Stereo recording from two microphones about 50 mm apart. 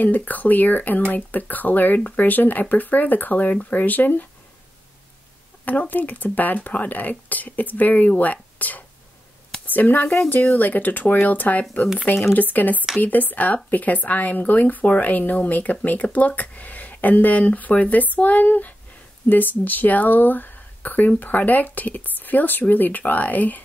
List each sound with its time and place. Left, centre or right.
0.0 s speech: left
5.7 s speech: left
12.1 s speech: left
12.4 s speech: left